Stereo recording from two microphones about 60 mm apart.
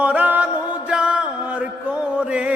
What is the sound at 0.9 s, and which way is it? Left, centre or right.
Music, centre.